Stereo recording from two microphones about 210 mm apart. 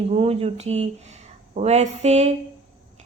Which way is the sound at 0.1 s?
30° right (ahead or behind).